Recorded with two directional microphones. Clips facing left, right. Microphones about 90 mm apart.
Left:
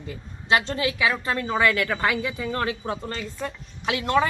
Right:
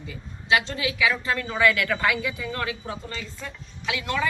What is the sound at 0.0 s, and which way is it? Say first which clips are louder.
A woman's voice: left 2 dB; 40° left (ahead or behind).